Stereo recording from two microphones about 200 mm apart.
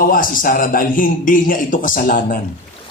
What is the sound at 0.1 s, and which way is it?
Speech, 45° left (ahead or behind).